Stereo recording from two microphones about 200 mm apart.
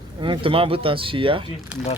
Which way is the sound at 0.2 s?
25° right (ahead or behind).